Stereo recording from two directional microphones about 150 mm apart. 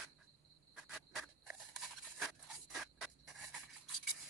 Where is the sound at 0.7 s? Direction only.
Centre (ahead or behind).